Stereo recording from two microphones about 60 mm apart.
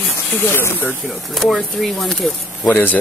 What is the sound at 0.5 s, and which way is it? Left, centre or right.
Speech, left.